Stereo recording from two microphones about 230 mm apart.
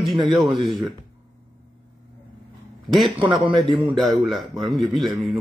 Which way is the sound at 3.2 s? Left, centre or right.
Right.